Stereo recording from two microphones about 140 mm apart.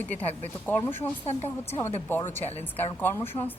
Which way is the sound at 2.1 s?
15° left (ahead or behind).